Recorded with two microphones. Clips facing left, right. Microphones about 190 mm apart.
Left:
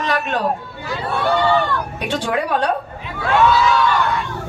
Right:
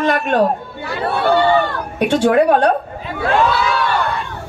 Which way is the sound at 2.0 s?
55° right (ahead or behind).